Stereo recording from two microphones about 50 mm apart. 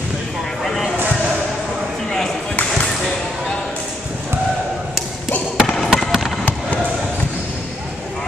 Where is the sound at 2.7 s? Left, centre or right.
Centre.